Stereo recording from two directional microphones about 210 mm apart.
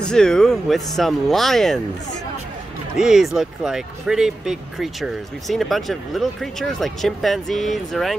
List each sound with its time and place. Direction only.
0.0 s speech: 5° left (ahead or behind)
3.0 s speech: centre (ahead or behind)